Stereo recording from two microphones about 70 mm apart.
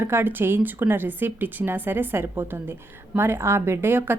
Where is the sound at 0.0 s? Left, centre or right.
Right.